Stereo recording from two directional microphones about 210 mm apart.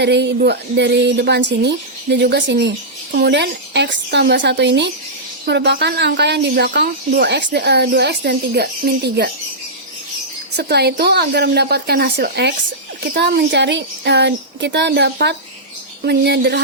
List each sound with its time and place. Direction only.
0.0 s a woman's voice: 55° right (ahead or behind)
10.6 s a woman's voice: 50° right (ahead or behind)